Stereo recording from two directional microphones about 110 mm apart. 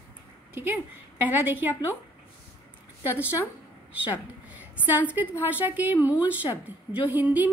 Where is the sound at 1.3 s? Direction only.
15° right (ahead or behind).